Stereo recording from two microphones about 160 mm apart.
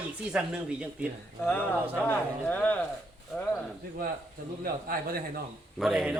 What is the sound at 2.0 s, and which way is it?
A man's voice, 10° left (ahead or behind).